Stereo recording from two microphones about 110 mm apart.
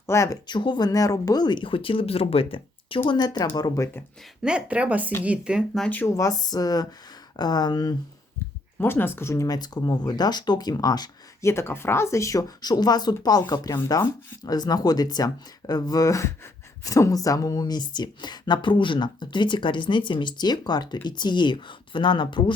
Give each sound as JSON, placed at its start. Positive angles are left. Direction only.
{"t": 0.0, "sound": "speech", "side_deg": 25}
{"t": 0.4, "sound": "speech", "side_deg": 45}
{"t": 3.2, "sound": "speech", "side_deg": 40}
{"t": 4.4, "sound": "speech", "side_deg": -10}
{"t": 5.8, "sound": "speech", "side_deg": 15}
{"t": 6.1, "sound": "speech", "side_deg": 35}
{"t": 8.8, "sound": "speech", "side_deg": 20}
{"t": 11.4, "sound": "speech", "side_deg": 25}